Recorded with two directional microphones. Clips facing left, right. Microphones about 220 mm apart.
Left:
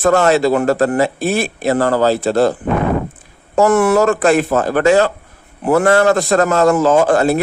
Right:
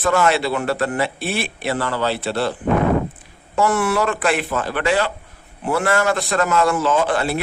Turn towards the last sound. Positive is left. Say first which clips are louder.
# left 7 dB
turn(degrees=45)  # may be behind; listen again after turning